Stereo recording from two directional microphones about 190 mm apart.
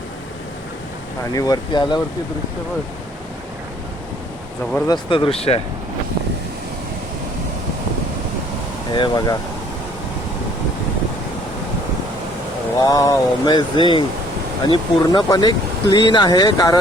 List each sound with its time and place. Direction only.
1.3 s speech: 20° left (ahead or behind)
4.9 s speech: 25° left (ahead or behind)
8.9 s speech: 25° left (ahead or behind)
12.8 s speech: 20° left (ahead or behind)